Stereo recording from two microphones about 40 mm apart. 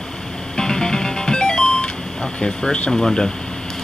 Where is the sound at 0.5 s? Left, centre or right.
Centre.